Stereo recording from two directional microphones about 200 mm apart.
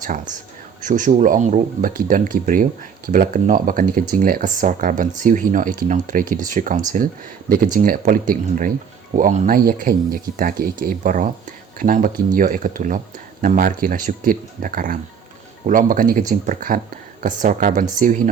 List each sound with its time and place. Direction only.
0.0 s speech: 40° right (ahead or behind)